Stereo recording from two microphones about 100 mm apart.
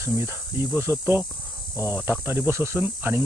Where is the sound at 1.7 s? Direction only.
25° right (ahead or behind).